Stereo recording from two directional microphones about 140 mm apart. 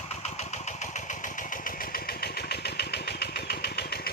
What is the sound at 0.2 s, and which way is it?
Engine, 55° left (ahead or behind).